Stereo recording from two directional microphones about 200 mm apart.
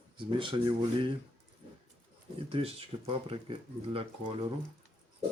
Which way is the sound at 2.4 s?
30° right (ahead or behind).